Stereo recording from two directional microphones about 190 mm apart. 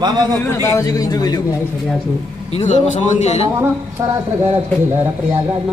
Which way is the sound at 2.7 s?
35° left (ahead or behind).